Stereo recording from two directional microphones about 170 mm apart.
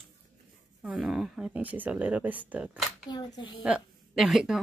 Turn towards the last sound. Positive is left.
turn(degrees=0)  # may be behind; listen again after turning